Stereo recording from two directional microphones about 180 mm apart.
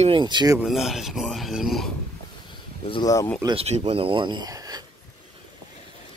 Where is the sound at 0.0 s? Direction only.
25° right (ahead or behind).